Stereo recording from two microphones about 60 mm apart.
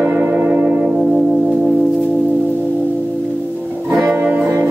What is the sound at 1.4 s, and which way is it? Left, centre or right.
Organ, centre.